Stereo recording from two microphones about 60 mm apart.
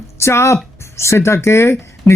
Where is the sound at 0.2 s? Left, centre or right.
Left.